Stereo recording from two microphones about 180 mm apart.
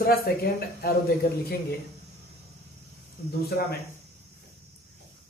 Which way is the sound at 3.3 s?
60° left (ahead or behind).